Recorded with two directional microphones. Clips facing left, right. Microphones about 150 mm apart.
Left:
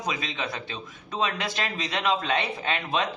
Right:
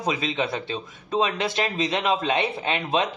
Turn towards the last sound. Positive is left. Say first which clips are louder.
# right 3 dB
turn(degrees=-20)  # may be behind; listen again after turning